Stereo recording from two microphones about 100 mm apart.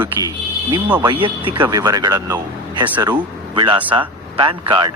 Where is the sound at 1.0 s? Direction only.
55° right (ahead or behind).